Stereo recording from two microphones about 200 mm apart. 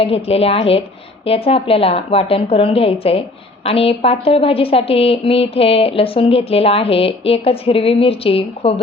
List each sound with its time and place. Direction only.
0.0 s a woman's voice: 30° left (ahead or behind)